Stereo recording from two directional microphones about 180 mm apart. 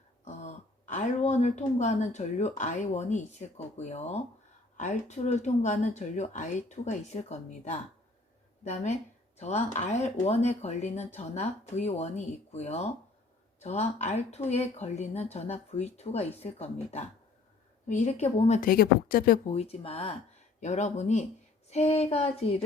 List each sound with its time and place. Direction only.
0.9 s a woman's voice: 40° left (ahead or behind)
19.5 s speech: 35° left (ahead or behind)